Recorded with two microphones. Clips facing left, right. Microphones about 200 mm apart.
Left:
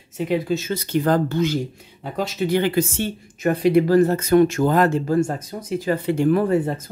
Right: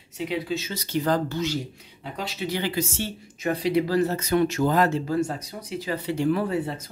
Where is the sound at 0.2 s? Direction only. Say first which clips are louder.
Left 6 dB; 50° left (ahead or behind).